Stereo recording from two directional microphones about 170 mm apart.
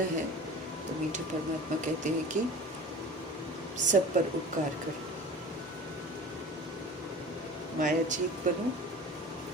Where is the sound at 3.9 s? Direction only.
50° right (ahead or behind).